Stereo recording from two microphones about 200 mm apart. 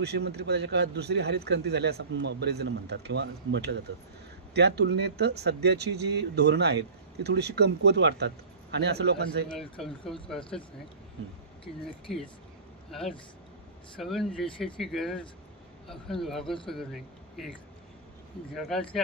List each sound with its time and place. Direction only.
0.0 s speech: 55° right (ahead or behind)
9.5 s speech: centre (ahead or behind)
13.9 s speech: centre (ahead or behind)
18.5 s speech: centre (ahead or behind)